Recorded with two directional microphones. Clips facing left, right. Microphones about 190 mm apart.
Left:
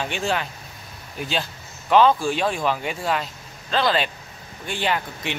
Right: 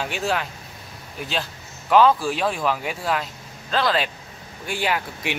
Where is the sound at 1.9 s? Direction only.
5° right (ahead or behind).